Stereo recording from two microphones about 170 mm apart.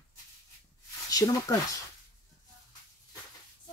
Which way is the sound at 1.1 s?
20° left (ahead or behind).